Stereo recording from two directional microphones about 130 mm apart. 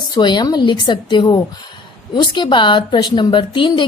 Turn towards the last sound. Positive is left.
turn(degrees=35)  # may be behind; listen again after turning